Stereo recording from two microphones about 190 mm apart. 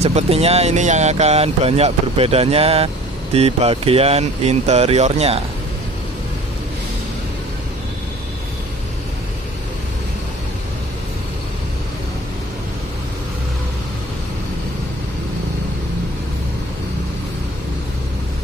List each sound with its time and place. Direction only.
0.0 s speech: 35° right (ahead or behind)